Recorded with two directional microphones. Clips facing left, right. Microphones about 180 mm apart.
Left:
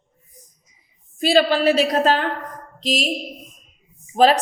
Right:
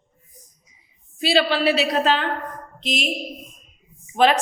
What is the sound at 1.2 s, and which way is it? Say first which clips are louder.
A woman's voice: left 3 dB; 45° left (ahead or behind).